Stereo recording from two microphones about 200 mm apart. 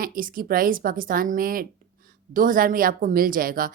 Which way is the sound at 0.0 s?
45° right (ahead or behind).